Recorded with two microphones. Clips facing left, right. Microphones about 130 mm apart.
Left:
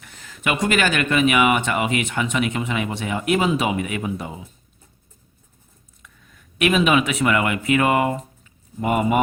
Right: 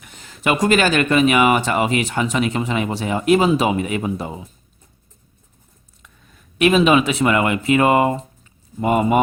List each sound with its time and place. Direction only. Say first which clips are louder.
0.0 s speech: right 4 dB; 20° right (ahead or behind)
6.6 s speech: right 4 dB; 30° right (ahead or behind)